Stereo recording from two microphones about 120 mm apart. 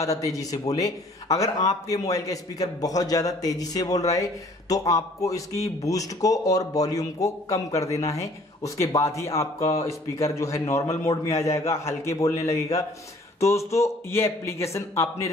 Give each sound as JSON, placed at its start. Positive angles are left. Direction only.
{"t": 0.0, "sound": "a man's voice", "side_deg": 30}
{"t": 11.2, "sound": "a man's voice", "side_deg": 65}
{"t": 11.5, "sound": "a man's voice", "side_deg": 25}
{"t": 13.7, "sound": "a man's voice", "side_deg": 25}